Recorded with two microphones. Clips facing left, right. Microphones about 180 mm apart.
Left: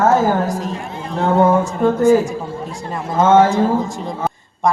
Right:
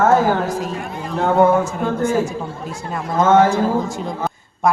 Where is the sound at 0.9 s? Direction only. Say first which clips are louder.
Left 1 dB; 30° left (ahead or behind).